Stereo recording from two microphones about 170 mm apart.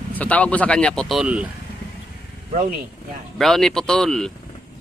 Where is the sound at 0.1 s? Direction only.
10° left (ahead or behind); by 1.5 s 5° right (ahead or behind).